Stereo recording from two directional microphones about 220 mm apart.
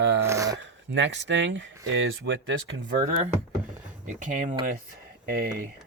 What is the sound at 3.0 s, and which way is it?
Speech, 35° right (ahead or behind).